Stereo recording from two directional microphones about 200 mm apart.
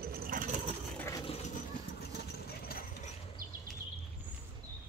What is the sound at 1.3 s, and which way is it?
Vehicle, 35° left (ahead or behind).